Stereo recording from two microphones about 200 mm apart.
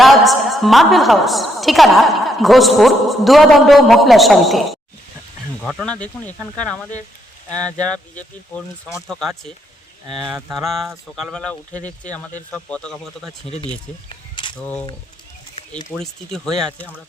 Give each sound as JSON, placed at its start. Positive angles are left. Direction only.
{"t": 0.0, "sound": "a woman's voice", "side_deg": 0}
{"t": 7.9, "sound": "speech", "side_deg": 5}
{"t": 10.5, "sound": "speech", "side_deg": 0}
{"t": 11.7, "sound": "speech", "side_deg": 35}
{"t": 12.5, "sound": "speech", "side_deg": 5}
{"t": 13.5, "sound": "speech", "side_deg": 30}
{"t": 14.5, "sound": "speech", "side_deg": 10}
{"t": 15.9, "sound": "speech", "side_deg": 0}